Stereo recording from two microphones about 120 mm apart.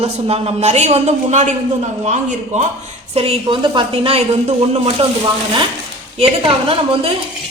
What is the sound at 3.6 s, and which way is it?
Speech, 45° right (ahead or behind).